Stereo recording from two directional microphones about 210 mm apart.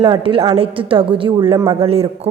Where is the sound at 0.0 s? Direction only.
25° right (ahead or behind).